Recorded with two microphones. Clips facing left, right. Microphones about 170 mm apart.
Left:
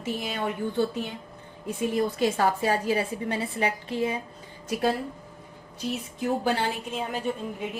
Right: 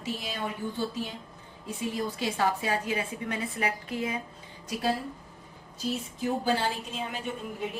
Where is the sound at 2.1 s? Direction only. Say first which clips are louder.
Left 4 dB; 50° left (ahead or behind); by 4.2 s 30° left (ahead or behind).